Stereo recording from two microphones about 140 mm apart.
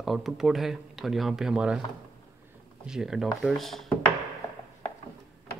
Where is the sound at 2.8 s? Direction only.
5° right (ahead or behind).